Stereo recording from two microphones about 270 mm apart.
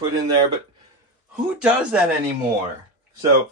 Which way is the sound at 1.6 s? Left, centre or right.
Centre.